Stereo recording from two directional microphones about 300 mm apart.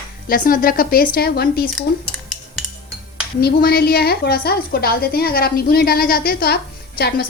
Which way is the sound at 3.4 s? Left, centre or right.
Left.